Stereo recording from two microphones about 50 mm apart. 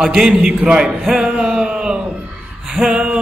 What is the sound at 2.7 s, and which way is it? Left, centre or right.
Speech, centre.